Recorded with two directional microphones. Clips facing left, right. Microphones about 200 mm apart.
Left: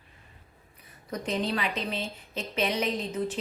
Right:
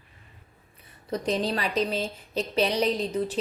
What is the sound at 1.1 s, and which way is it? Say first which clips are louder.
A woman's voice: right 3 dB; 35° right (ahead or behind).